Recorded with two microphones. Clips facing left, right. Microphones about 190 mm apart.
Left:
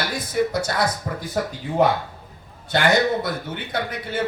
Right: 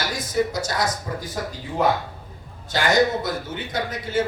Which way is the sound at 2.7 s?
60° left (ahead or behind).